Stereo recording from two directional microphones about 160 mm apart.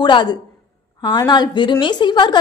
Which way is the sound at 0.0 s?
30° left (ahead or behind).